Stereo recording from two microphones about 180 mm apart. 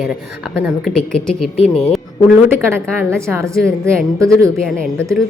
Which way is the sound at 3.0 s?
15° right (ahead or behind).